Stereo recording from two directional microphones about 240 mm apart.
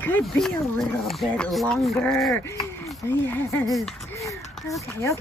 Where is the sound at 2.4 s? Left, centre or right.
Centre.